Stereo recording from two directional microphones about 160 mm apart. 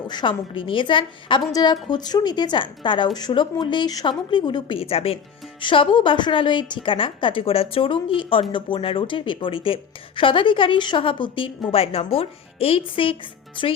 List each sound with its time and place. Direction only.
0.1 s a woman's voice: 30° left (ahead or behind)